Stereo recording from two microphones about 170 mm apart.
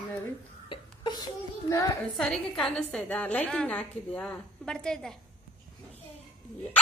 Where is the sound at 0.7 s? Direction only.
25° left (ahead or behind).